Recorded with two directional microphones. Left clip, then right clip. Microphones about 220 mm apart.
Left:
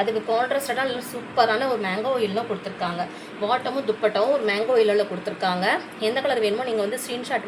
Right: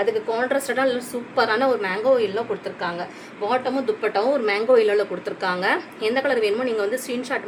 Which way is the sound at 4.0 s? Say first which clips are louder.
Left 2 dB; 30° right (ahead or behind).